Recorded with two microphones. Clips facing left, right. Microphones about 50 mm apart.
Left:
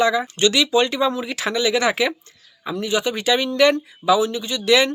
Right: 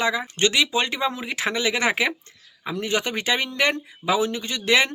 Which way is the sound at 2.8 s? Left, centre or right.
Right.